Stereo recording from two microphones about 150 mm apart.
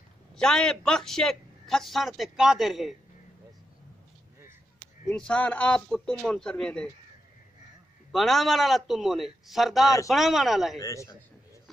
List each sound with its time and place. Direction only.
0.4 s a man's voice: 5° left (ahead or behind)
5.0 s a man's voice: 5° left (ahead or behind)
8.1 s a man's voice: centre (ahead or behind)
10.8 s a man's voice: 20° left (ahead or behind)